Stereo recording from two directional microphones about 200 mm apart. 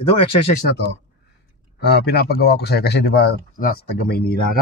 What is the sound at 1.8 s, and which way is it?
Speech, 55° left (ahead or behind).